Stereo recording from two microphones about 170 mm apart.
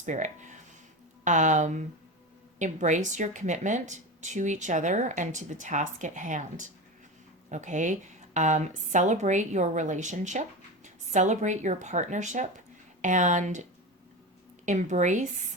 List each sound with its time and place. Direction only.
0.0 s speech: 45° right (ahead or behind)